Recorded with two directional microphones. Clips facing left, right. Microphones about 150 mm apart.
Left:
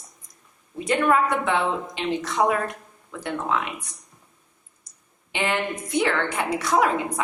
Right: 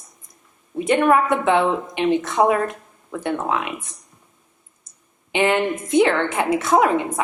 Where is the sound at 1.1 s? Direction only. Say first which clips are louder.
Right 5 dB; 20° right (ahead or behind).